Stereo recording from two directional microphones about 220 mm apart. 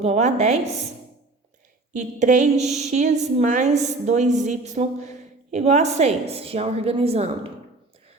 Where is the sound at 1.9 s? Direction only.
35° right (ahead or behind).